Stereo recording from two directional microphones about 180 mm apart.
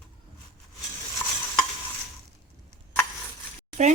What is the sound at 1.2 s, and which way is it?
Stir, 20° left (ahead or behind).